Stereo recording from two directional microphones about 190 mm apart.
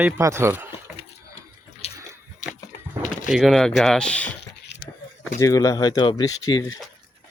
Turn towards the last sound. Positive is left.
turn(degrees=25)  # may be behind; listen again after turning